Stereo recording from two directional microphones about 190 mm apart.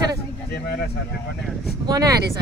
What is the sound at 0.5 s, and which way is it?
Speech, 55° left (ahead or behind).